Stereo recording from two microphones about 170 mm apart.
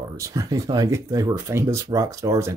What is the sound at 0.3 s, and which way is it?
Speech, 20° right (ahead or behind).